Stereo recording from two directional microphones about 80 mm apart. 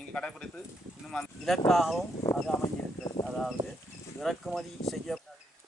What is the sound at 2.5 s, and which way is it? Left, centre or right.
Speech, left.